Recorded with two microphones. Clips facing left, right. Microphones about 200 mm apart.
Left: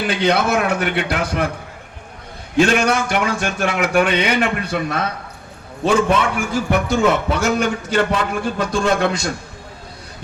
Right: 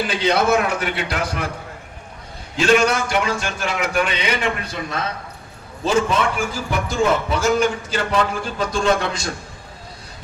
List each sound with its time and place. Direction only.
0.1 s a man's voice: 60° left (ahead or behind)
2.6 s a man's voice: 55° left (ahead or behind)